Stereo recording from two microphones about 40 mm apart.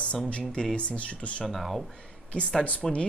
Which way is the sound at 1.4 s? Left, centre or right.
Centre.